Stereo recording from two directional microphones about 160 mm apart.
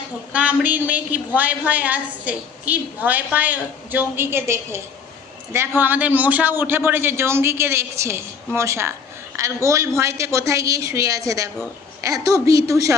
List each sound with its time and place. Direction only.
0.3 s a woman's voice: 10° right (ahead or behind)